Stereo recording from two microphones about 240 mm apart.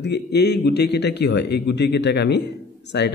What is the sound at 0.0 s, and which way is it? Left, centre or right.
A man's voice, left.